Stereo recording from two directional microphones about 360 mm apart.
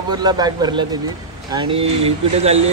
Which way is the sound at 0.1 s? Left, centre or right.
Centre.